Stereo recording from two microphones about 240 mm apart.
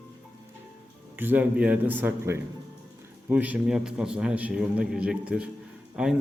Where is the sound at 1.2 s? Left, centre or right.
Centre.